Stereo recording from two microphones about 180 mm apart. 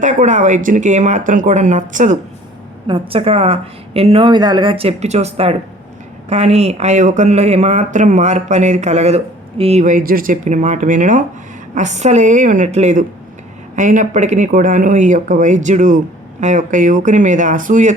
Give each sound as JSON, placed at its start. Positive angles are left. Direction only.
{"t": 0.0, "sound": "speech", "side_deg": -45}
{"t": 2.8, "sound": "speech", "side_deg": -30}